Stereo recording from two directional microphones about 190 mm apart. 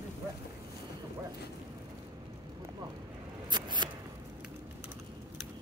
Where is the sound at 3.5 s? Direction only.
25° right (ahead or behind).